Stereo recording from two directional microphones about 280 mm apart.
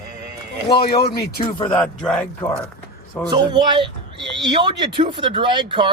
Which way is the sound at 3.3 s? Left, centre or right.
Centre.